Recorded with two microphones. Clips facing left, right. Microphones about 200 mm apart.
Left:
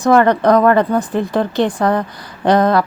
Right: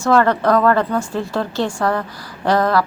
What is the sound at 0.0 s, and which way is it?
A woman's voice, 15° left (ahead or behind).